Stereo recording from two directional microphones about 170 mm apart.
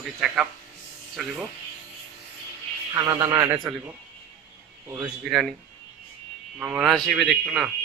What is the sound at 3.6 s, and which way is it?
Speech, 5° right (ahead or behind).